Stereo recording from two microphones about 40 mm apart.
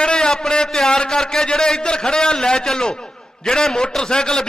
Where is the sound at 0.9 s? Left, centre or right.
Centre.